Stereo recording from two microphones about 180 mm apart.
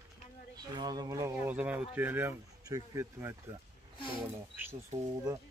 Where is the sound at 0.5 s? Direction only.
20° right (ahead or behind).